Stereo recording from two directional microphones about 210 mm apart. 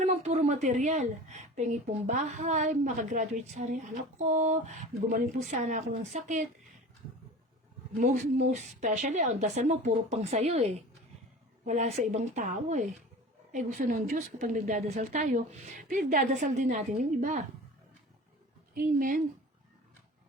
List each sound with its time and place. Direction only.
0.0 s a woman's voice: 35° right (ahead or behind)
7.9 s a woman's voice: 35° right (ahead or behind)
18.7 s a woman's voice: 45° right (ahead or behind)